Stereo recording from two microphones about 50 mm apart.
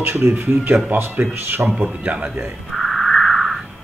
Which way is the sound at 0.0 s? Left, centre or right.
Right.